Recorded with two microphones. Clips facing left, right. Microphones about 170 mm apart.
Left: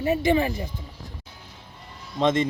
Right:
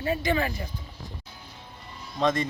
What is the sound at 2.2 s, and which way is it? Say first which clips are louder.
Speech: left 3 dB; 20° left (ahead or behind).